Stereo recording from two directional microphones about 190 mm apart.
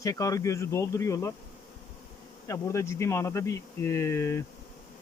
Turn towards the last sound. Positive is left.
turn(degrees=15)  # may be behind; listen again after turning